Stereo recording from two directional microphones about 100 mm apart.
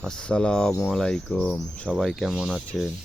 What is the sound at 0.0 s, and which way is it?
Speech, 5° left (ahead or behind).